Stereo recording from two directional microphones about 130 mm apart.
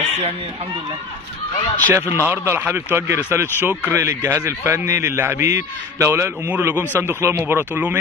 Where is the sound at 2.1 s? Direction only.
15° right (ahead or behind).